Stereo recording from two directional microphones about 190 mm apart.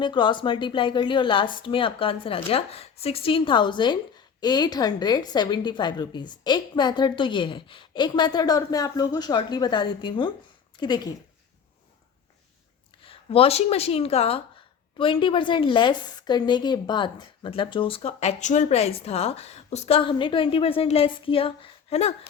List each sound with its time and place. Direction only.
0.0 s a woman's voice: 25° left (ahead or behind)
13.0 s a woman's voice: 30° left (ahead or behind)